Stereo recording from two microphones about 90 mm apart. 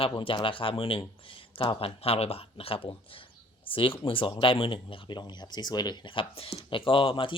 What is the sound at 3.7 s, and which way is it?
Speech, 75° left (ahead or behind).